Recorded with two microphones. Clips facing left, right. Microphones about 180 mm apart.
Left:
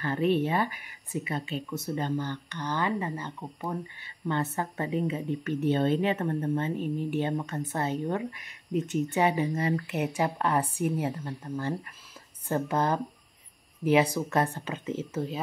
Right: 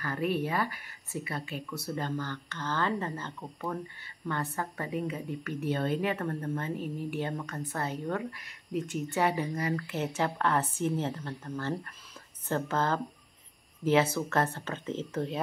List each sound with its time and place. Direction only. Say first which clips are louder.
0.0 s a woman's voice: left 5 dB; 25° left (ahead or behind); by 15.4 s 5° left (ahead or behind)